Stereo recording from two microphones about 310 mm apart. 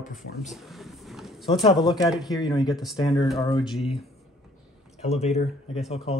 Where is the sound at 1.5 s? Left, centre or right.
Centre.